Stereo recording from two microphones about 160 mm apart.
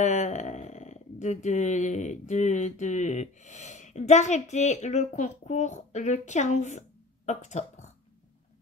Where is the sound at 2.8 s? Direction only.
50° left (ahead or behind).